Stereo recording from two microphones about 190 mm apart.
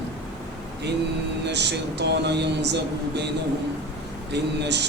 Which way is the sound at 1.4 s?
65° right (ahead or behind).